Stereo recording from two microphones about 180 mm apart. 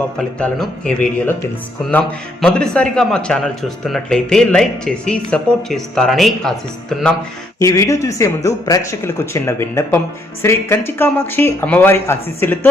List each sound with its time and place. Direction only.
0.2 s a man's voice: 5° left (ahead or behind)
7.6 s speech: 15° left (ahead or behind)